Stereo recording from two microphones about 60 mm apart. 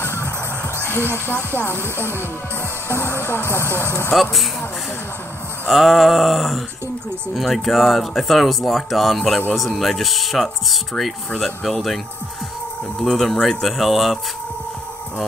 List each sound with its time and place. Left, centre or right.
0.0 s music: left
1.0 s speech: right
1.6 s music: left
2.9 s speech: left
4.1 s speech: centre
5.7 s speech: centre
13.0 s speech: centre